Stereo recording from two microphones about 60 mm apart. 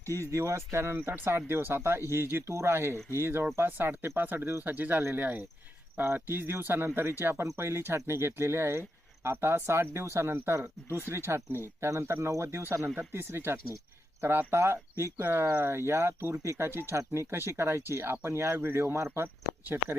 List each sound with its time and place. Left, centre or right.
0.0 s speech: right
15.2 s speech: right